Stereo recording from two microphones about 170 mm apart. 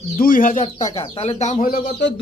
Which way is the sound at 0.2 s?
55° left (ahead or behind).